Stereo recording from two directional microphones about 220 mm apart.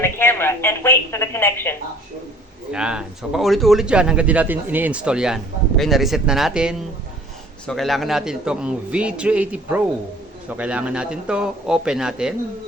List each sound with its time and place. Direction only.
0.0 s speech: 10° left (ahead or behind)
2.7 s speech: 5° right (ahead or behind)